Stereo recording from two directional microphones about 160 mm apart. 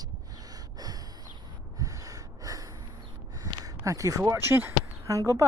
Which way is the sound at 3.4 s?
20° right (ahead or behind).